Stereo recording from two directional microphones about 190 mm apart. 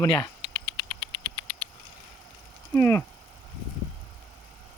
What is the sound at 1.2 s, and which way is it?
Patter, 30° left (ahead or behind).